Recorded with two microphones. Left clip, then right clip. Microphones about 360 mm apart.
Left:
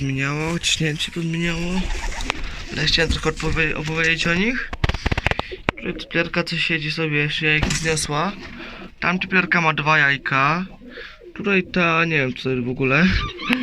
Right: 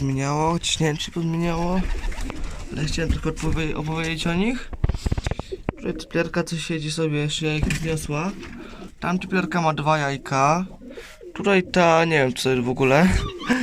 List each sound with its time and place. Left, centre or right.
0.2 s speech: centre
2.7 s speech: centre
4.8 s a sound: left
5.8 s speech: centre
11.3 s speech: right